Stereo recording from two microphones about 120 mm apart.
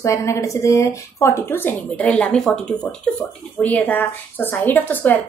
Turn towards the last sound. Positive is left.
turn(degrees=15)  # may be behind; listen again after turning